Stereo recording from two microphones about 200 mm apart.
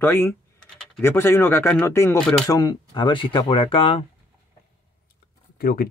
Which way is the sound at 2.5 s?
20° left (ahead or behind).